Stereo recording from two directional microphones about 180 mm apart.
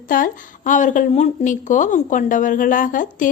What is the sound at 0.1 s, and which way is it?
A woman's voice, 50° left (ahead or behind).